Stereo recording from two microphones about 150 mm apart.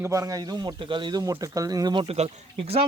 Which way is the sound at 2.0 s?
45° right (ahead or behind).